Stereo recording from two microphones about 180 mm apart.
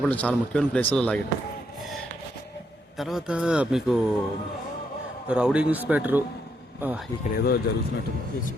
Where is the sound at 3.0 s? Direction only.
Centre (ahead or behind).